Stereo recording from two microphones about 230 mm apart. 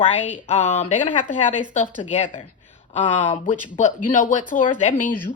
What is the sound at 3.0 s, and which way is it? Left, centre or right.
Speech, left.